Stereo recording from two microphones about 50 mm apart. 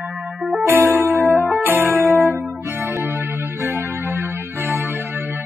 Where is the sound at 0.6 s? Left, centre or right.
Right.